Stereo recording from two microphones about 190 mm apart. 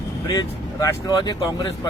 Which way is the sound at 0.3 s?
20° left (ahead or behind).